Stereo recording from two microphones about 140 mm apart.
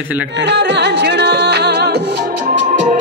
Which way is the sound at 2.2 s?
75° right (ahead or behind).